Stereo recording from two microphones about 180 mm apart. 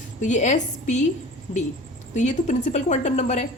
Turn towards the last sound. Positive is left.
turn(degrees=40)  # may be behind; listen again after turning